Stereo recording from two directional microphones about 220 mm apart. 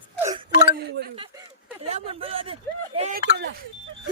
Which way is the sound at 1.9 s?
30° right (ahead or behind).